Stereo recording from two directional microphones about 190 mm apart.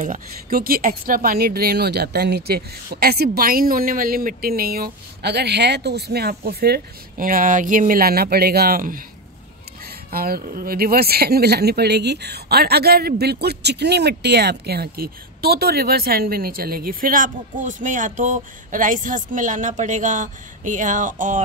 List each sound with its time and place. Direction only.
0.0 s speech: 50° right (ahead or behind)
10.1 s speech: 50° right (ahead or behind)